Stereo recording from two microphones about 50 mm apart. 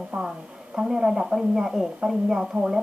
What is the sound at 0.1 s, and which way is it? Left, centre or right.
A woman's voice, centre.